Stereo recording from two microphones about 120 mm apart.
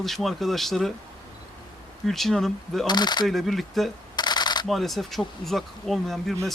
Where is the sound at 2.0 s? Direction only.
Centre (ahead or behind).